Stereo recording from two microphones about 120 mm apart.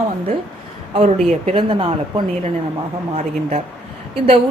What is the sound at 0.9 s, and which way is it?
Speech, 60° right (ahead or behind).